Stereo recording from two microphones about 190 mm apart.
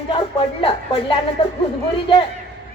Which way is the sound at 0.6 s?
30° left (ahead or behind).